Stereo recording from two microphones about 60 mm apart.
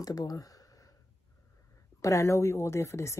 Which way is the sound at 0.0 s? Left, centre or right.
Left.